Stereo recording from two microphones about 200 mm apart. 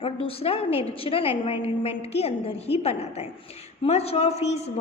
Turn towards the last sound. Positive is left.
turn(degrees=30)  # may be behind; listen again after turning